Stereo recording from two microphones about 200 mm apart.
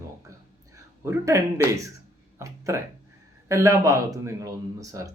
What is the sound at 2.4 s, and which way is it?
Speech, 15° right (ahead or behind).